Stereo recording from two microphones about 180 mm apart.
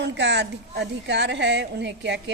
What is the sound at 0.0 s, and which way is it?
A woman's voice, 75° right (ahead or behind).